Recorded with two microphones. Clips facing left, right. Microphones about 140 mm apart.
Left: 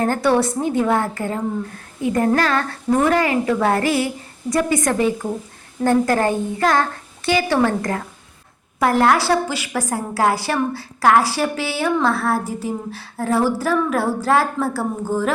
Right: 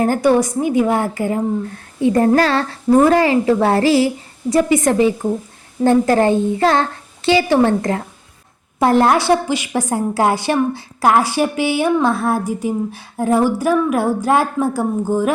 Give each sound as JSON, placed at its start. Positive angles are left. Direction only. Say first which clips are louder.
{"t": 0.0, "sound": "a woman's voice", "louder": "right 3 dB", "side_deg": -15}
{"t": 2.0, "sound": "a woman's voice", "louder": "right 5 dB", "side_deg": -30}